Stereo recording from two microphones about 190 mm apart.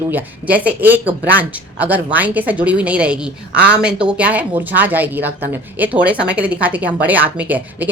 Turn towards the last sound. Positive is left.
turn(degrees=-10)  # may be behind; listen again after turning